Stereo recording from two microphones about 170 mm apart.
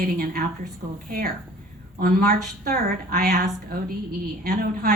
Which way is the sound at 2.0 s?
60° right (ahead or behind).